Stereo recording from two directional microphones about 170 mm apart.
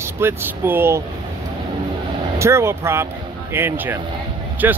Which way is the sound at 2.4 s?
15° right (ahead or behind).